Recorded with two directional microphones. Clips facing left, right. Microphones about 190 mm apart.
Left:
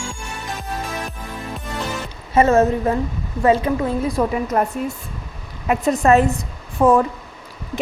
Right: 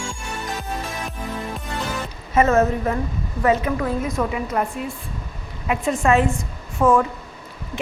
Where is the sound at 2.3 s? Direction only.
30° left (ahead or behind).